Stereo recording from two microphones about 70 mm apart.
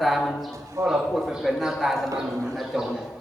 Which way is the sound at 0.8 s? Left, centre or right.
Right.